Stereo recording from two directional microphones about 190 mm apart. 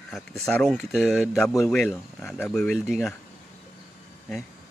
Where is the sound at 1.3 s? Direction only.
15° left (ahead or behind).